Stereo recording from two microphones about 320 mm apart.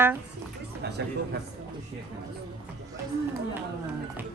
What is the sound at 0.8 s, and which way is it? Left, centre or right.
Speech, right.